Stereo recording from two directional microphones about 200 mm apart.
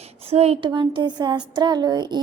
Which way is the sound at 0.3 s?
30° right (ahead or behind).